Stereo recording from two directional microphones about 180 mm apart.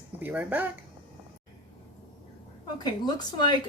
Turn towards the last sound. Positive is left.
turn(degrees=25)  # may be behind; listen again after turning